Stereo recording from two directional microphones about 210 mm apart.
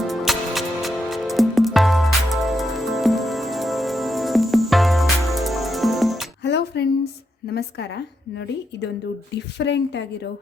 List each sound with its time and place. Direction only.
0.0 s music: centre (ahead or behind)
6.4 s music: 55° left (ahead or behind)
7.5 s a woman's voice: 55° left (ahead or behind)